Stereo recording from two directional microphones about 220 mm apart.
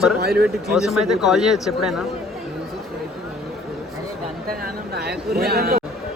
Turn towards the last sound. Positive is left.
turn(degrees=-45)  # may be behind; listen again after turning